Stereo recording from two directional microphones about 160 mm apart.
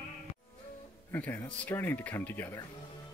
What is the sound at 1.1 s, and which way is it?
Speech, 10° left (ahead or behind).